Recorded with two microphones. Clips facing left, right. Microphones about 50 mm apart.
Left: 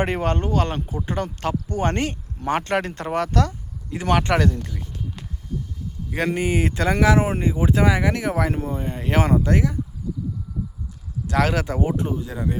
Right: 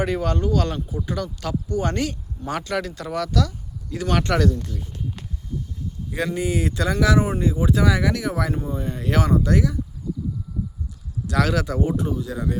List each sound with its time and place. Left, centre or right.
0.0 s speech: left
3.9 s speech: left
6.1 s speech: left
11.3 s speech: left